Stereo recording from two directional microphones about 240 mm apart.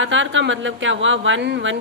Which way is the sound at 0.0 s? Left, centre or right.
Right.